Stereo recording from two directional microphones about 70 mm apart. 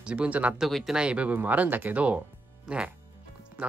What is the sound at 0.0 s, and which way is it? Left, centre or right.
Speech, centre.